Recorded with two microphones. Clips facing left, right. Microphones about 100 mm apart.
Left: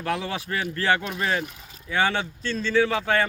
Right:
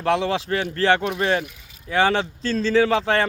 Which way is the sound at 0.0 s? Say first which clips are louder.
Right 7 dB; 30° right (ahead or behind).